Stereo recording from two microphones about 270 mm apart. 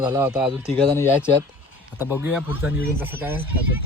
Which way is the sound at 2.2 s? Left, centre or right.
Centre.